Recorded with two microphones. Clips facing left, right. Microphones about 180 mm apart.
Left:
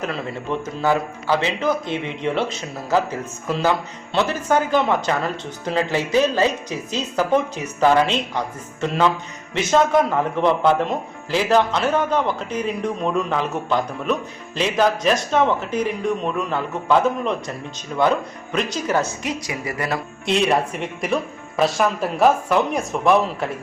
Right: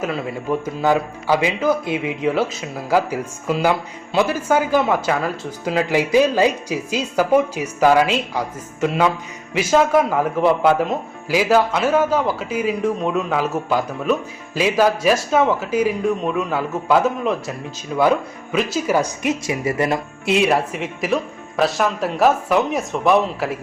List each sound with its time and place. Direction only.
0.0 s a man's voice: 10° right (ahead or behind)
19.2 s a woman's voice: 25° right (ahead or behind)
20.2 s speech: 5° right (ahead or behind)